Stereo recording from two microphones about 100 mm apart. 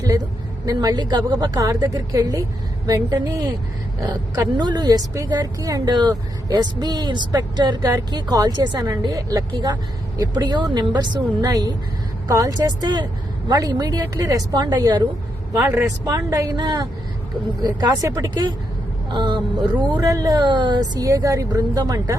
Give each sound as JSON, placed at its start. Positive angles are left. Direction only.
{"t": 0.6, "sound": "a woman's voice", "side_deg": -40}
{"t": 16.0, "sound": "a woman's voice", "side_deg": -35}
{"t": 19.1, "sound": "speech", "side_deg": -50}
{"t": 20.0, "sound": "a woman's voice", "side_deg": -35}